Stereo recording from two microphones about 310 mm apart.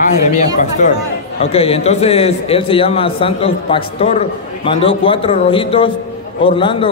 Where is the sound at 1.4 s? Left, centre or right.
Centre.